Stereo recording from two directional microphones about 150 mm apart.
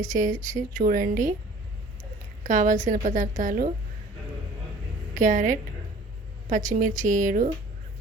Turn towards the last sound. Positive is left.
turn(degrees=-65)  # may be behind; listen again after turning